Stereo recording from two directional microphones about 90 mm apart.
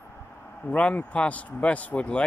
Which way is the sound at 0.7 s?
15° left (ahead or behind).